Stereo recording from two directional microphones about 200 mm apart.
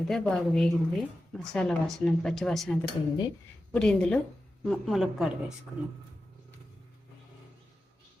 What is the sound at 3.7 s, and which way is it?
Speech, 5° left (ahead or behind).